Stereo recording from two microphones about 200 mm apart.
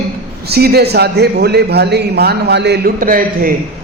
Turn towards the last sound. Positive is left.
turn(degrees=-45)  # may be behind; listen again after turning